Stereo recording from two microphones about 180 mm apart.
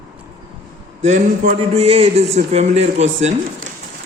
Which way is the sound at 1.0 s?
40° right (ahead or behind).